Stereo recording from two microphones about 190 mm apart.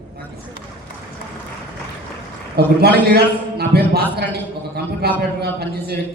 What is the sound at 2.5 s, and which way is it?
A man's voice, 55° right (ahead or behind).